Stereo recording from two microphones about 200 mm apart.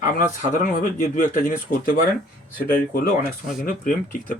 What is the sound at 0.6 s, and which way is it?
Speech, 45° left (ahead or behind).